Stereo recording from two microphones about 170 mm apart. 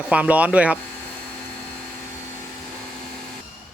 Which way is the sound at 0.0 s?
10° right (ahead or behind).